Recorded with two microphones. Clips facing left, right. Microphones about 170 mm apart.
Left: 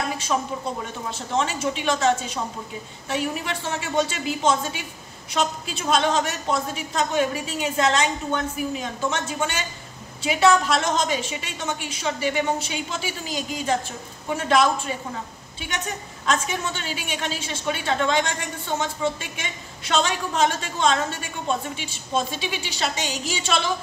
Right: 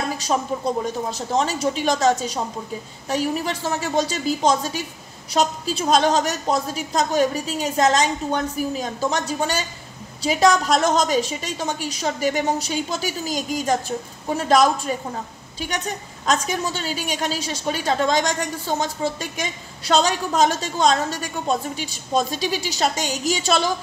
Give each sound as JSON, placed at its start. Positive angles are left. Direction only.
{"t": 0.3, "sound": "a woman's voice", "side_deg": -35}